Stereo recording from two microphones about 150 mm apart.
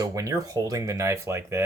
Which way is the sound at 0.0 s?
20° right (ahead or behind).